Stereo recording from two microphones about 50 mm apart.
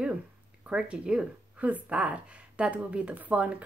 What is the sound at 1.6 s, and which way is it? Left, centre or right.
A woman's voice, right.